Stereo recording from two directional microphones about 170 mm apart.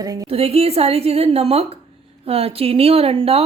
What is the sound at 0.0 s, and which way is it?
Speech, 20° right (ahead or behind).